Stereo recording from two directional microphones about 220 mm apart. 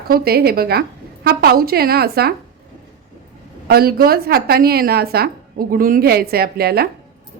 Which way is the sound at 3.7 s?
45° right (ahead or behind).